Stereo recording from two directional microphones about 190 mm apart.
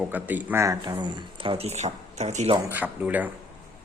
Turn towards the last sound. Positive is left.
turn(degrees=-10)  # may be behind; listen again after turning